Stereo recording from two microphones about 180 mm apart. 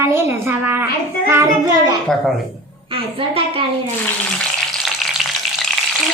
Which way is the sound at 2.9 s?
30° right (ahead or behind).